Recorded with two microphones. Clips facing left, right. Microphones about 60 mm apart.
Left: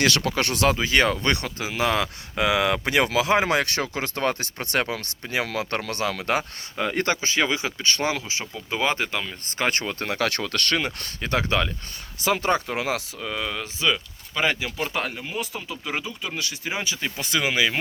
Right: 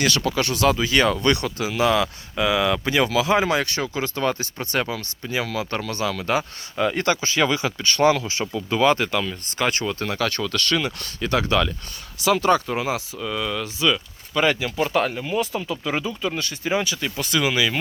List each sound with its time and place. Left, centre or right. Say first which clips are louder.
0.0 s speech: right 1 dB; left
0.7 s speech: right 1 dB; left
2.4 s speech: right 1 dB; left
9.6 s speech: right 2 dB; left
10.8 s speech: right 2 dB; left
12.6 s speech: right 2 dB; left
13.2 s speech: right 5 dB; left
14.3 s speech: right 4 dB; centre
16.7 s speech: right 6 dB; left